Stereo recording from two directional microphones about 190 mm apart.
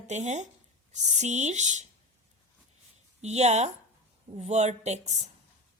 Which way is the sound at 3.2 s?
35° right (ahead or behind).